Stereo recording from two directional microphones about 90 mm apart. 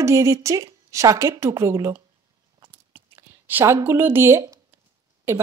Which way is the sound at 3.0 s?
25° right (ahead or behind).